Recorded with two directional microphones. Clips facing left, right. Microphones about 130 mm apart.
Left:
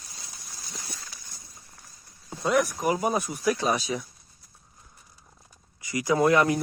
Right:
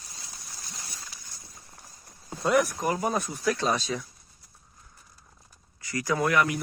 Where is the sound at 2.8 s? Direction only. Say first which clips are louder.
Left 2 dB; 10° left (ahead or behind).